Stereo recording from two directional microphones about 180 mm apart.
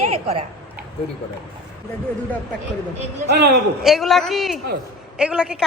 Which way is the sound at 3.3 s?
65° right (ahead or behind).